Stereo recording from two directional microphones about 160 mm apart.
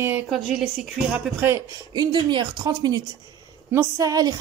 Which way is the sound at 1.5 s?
25° right (ahead or behind).